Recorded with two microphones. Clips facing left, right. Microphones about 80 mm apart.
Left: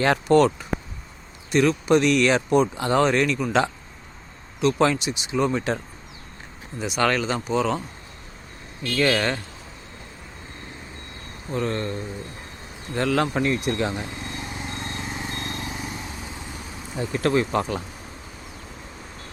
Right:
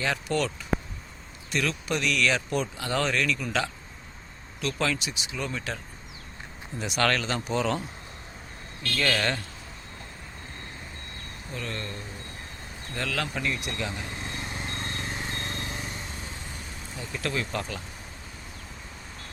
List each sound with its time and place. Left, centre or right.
0.0 s speech: left
1.5 s speech: left
6.7 s speech: centre
8.8 s speech: centre
11.5 s speech: left
14.7 s a sound: centre
15.2 s vehicle: centre
17.1 s speech: left